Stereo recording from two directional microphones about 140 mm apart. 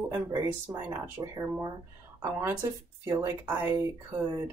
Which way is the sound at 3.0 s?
20° right (ahead or behind).